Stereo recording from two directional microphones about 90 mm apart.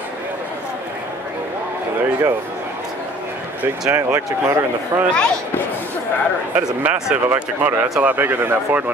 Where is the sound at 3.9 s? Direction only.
25° right (ahead or behind).